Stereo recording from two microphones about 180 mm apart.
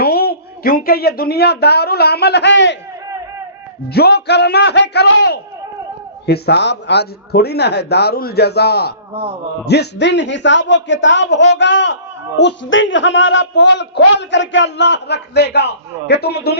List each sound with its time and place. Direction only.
0.0 s speech: 60° left (ahead or behind); by 2.7 s 80° left
3.9 s a man's voice: 65° left (ahead or behind)